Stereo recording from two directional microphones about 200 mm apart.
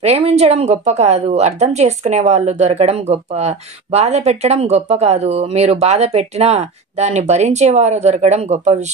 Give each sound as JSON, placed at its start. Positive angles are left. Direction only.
{"t": 0.0, "sound": "speech", "side_deg": -30}